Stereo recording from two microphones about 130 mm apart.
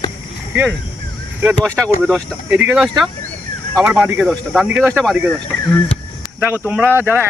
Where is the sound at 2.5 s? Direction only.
10° right (ahead or behind).